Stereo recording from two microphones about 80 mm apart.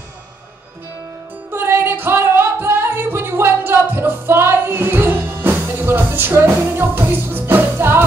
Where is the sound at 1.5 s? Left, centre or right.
Right.